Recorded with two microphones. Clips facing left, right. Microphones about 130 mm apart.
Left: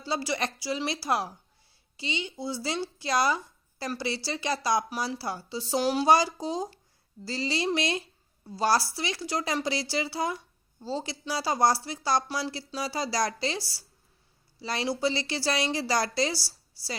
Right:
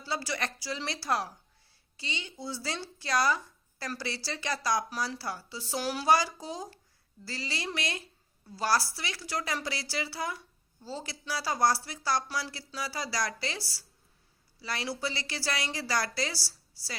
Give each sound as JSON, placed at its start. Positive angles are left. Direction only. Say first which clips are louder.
{"t": 0.0, "sound": "a woman's voice", "louder": "left 4 dB", "side_deg": 20}